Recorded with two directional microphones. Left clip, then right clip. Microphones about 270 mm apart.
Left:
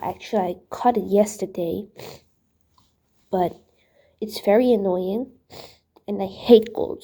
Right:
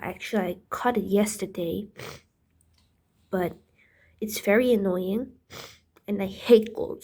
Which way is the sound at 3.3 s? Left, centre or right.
Centre.